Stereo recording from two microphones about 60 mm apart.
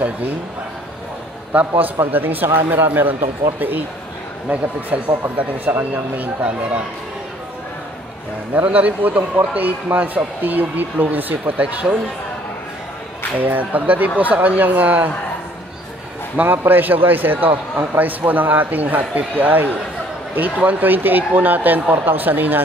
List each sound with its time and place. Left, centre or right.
1.8 s a man's voice: right
8.5 s speech: right
13.4 s speech: right
16.3 s a man's voice: right